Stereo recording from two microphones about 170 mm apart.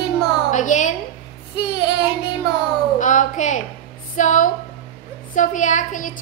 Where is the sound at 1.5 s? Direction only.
25° left (ahead or behind).